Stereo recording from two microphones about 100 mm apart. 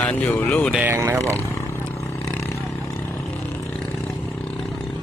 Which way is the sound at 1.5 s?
25° left (ahead or behind).